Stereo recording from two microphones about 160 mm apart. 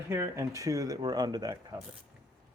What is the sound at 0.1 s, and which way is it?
Speech, 20° right (ahead or behind).